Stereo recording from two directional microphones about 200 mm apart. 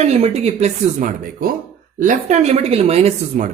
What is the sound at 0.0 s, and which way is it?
Speech, 35° right (ahead or behind).